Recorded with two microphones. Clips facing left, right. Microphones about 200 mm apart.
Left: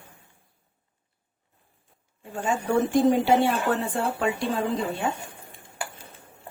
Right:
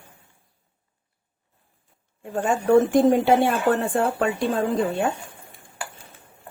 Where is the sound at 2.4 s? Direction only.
55° right (ahead or behind).